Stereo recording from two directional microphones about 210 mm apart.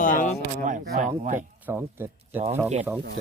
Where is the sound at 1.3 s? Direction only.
10° right (ahead or behind).